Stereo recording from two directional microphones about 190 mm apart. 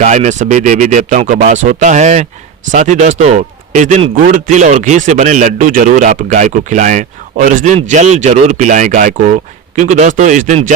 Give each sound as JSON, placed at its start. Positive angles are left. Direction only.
{"t": 0.0, "sound": "a man's voice", "side_deg": -35}